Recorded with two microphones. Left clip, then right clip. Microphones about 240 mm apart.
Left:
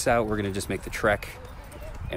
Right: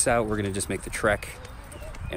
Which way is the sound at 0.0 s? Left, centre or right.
Centre.